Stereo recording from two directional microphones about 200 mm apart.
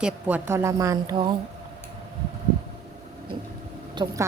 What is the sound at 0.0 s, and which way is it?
A woman's voice, 10° right (ahead or behind).